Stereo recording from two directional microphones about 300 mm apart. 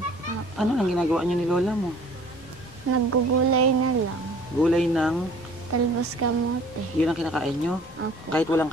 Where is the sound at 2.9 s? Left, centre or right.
Right.